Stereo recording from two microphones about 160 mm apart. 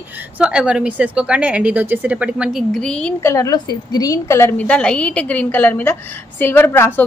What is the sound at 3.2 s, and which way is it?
A woman's voice, 20° left (ahead or behind).